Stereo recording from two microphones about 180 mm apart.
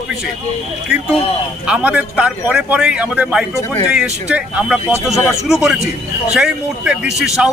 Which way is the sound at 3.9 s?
5° right (ahead or behind).